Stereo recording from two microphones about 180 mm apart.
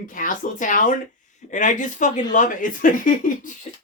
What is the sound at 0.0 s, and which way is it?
Speech, 50° left (ahead or behind).